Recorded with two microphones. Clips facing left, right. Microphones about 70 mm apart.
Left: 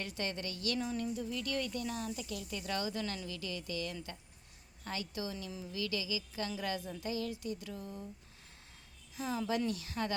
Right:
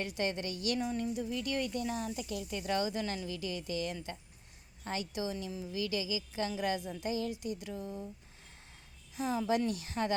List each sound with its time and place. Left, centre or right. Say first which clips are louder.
0.0 s speech: right 4 dB; right
9.1 s speech: right 4 dB; right